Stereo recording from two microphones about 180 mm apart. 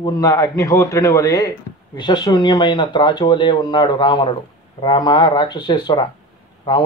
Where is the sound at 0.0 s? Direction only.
20° left (ahead or behind).